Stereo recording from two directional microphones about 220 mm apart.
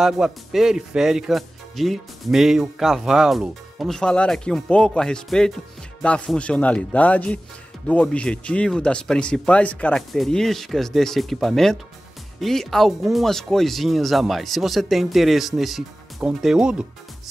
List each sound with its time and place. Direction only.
0.0 s speech: centre (ahead or behind)